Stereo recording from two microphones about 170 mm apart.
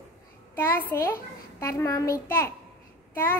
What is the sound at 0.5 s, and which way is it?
A child's voice, 10° left (ahead or behind).